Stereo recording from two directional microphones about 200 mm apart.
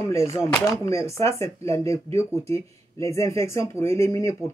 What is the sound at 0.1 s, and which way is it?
Speech, 15° left (ahead or behind).